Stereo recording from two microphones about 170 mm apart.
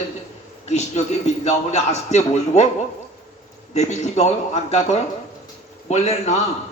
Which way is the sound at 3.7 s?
40° left (ahead or behind).